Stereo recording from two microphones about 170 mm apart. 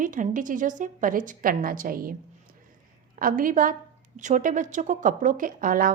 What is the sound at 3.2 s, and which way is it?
A woman's voice, 55° right (ahead or behind).